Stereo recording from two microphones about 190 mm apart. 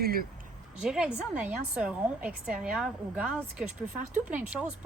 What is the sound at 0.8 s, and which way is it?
A woman's voice, 5° right (ahead or behind).